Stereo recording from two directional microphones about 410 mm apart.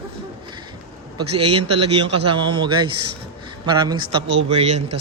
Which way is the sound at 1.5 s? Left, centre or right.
Centre.